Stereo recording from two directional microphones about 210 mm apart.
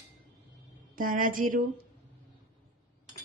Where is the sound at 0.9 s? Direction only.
40° right (ahead or behind).